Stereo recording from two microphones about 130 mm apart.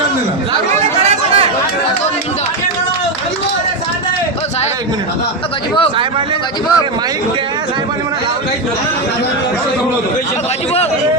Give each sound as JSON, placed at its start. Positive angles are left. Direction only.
{"t": 0.8, "sound": "chatter", "side_deg": -55}